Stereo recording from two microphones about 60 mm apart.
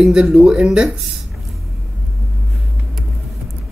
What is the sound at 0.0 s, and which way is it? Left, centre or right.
Speech, centre.